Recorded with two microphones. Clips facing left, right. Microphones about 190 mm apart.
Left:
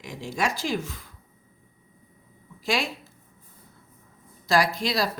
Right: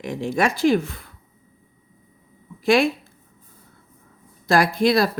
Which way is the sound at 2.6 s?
55° right (ahead or behind).